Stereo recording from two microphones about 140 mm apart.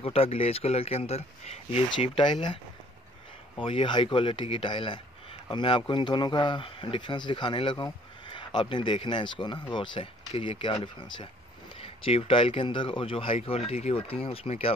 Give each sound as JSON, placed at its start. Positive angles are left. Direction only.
{"t": 0.0, "sound": "a man's voice", "side_deg": 45}